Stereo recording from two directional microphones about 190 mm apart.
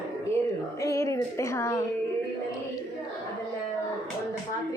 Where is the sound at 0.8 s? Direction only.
15° left (ahead or behind).